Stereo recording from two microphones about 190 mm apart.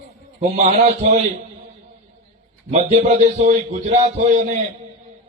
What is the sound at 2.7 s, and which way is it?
A man's voice, 40° right (ahead or behind).